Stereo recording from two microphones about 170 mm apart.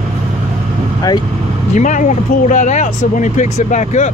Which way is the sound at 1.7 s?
45° left (ahead or behind).